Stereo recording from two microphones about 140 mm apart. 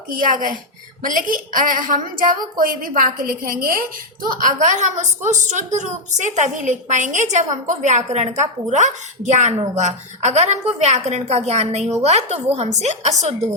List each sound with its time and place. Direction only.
0.1 s a woman's voice: 75° right (ahead or behind); by 13.1 s 55° right (ahead or behind)